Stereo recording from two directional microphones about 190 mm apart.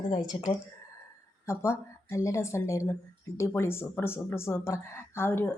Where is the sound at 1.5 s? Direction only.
15° left (ahead or behind).